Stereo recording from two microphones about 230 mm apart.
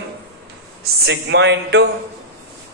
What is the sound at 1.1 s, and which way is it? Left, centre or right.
Speech, right.